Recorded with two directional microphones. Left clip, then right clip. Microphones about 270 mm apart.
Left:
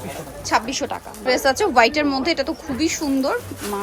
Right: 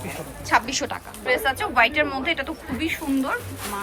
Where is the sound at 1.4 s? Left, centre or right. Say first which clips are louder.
Left 5 dB; left.